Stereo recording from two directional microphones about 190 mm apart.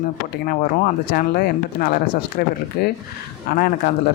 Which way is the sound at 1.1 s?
50° left (ahead or behind).